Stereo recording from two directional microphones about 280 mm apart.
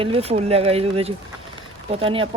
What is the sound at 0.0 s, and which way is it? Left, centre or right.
Speech, right.